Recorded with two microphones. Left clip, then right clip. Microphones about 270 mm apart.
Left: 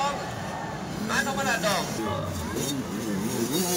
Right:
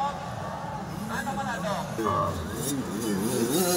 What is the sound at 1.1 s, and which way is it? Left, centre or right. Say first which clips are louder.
Vehicle: left 5 dB; left.